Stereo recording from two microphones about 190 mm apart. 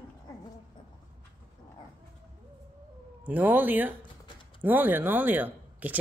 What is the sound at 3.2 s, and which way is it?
Speech, 10° right (ahead or behind).